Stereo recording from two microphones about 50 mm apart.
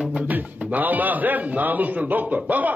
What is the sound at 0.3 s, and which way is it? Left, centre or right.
A man's voice, right.